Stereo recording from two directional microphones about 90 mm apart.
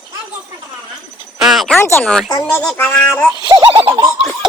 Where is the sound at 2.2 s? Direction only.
45° left (ahead or behind).